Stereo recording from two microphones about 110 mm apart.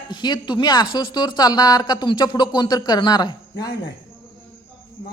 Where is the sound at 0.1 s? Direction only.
40° left (ahead or behind).